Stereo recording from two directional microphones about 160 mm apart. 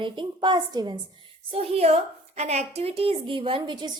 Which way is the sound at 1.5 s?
40° right (ahead or behind).